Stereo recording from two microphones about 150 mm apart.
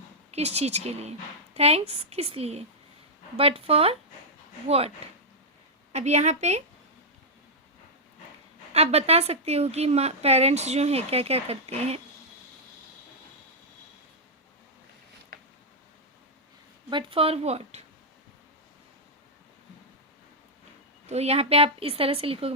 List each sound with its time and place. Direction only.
0.3 s a woman's voice: 45° right (ahead or behind)
5.0 s a woman's voice: 45° right (ahead or behind)
8.7 s a woman's voice: 45° right (ahead or behind)
16.9 s a woman's voice: 35° right (ahead or behind)
21.1 s a woman's voice: 45° right (ahead or behind)